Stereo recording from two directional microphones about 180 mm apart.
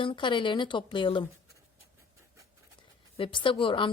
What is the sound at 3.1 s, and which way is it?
Speech, 30° left (ahead or behind).